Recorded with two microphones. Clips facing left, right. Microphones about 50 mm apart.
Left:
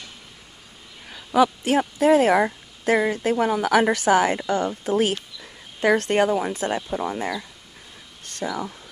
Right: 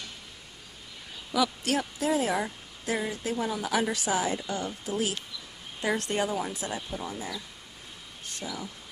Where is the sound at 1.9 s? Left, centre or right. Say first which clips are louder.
Left 13 dB; left.